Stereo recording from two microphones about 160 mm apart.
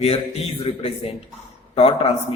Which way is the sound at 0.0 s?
35° left (ahead or behind).